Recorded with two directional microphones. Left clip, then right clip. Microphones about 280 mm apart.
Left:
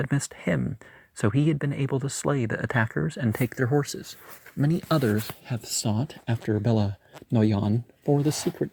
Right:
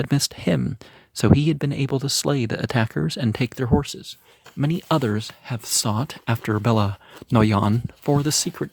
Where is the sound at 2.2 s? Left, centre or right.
Right.